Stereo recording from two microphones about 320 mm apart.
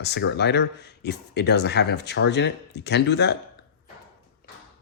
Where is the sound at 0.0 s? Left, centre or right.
Left.